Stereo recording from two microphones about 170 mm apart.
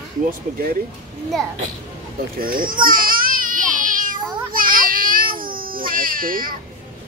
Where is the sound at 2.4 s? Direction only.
55° right (ahead or behind).